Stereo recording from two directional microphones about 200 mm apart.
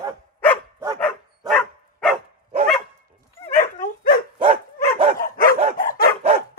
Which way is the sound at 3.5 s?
40° left (ahead or behind).